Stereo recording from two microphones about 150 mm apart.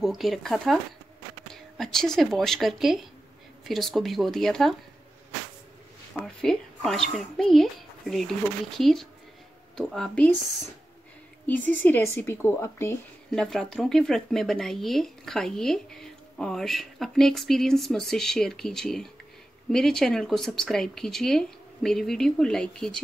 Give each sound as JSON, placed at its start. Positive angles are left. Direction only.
{"t": 0.0, "sound": "speech", "side_deg": 0}
{"t": 6.1, "sound": "speech", "side_deg": 5}
{"t": 11.4, "sound": "speech", "side_deg": 10}
{"t": 13.3, "sound": "speech", "side_deg": 5}